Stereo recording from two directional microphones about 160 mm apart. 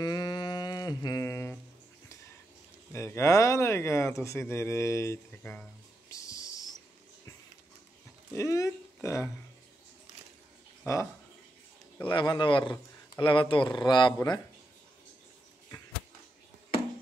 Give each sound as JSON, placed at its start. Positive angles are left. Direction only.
{"t": 0.0, "sound": "a sound", "side_deg": 25}
{"t": 2.9, "sound": "speech", "side_deg": 15}
{"t": 6.0, "sound": "a sound", "side_deg": 20}
{"t": 8.4, "sound": "speech", "side_deg": 20}
{"t": 10.9, "sound": "speech", "side_deg": 20}
{"t": 12.1, "sound": "speech", "side_deg": 30}